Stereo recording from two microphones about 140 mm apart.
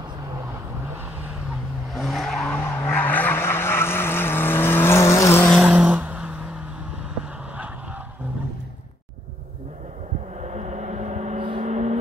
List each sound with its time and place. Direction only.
2.0 s skidding: centre (ahead or behind); by 5.5 s 20° left (ahead or behind)
5.5 s a sound: 5° right (ahead or behind)
10.4 s vehicle: 55° right (ahead or behind)